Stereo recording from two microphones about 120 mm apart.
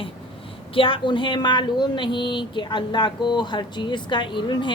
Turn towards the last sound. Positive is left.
turn(degrees=40)  # may be behind; listen again after turning